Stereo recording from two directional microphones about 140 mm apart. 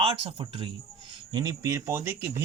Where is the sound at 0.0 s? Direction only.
40° right (ahead or behind).